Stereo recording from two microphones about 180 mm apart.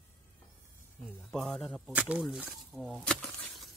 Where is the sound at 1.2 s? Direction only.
Centre (ahead or behind).